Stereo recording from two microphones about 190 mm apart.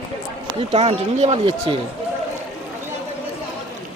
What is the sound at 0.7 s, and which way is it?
Speech, 35° right (ahead or behind).